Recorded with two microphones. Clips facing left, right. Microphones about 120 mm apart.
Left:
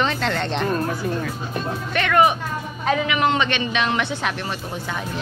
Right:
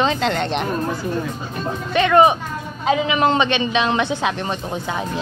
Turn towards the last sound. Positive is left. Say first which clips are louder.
# right 4 dB
turn(degrees=-20)  # may be behind; listen again after turning